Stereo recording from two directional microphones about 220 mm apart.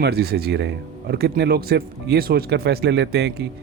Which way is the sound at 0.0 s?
45° right (ahead or behind).